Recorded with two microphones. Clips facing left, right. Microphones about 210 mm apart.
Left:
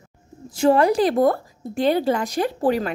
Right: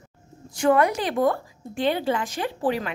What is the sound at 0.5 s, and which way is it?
A woman's voice, 30° left (ahead or behind).